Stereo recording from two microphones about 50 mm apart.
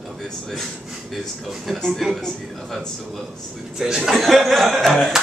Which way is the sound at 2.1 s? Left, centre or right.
Centre.